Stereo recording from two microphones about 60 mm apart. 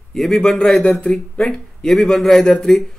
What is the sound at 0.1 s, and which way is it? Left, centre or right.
A man's voice, centre.